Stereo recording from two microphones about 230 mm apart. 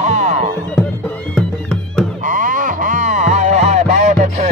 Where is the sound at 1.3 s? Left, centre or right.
Centre.